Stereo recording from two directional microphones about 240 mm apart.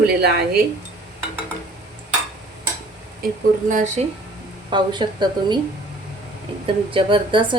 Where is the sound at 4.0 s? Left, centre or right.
Right.